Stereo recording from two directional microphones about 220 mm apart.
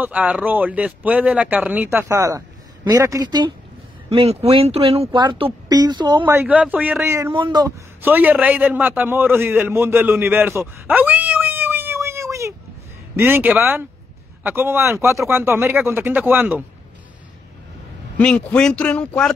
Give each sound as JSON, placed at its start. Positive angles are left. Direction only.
{"t": 0.0, "sound": "speech", "side_deg": -5}
{"t": 6.2, "sound": "speech", "side_deg": -5}
{"t": 8.0, "sound": "a man's voice", "side_deg": -10}
{"t": 18.1, "sound": "a man's voice", "side_deg": 5}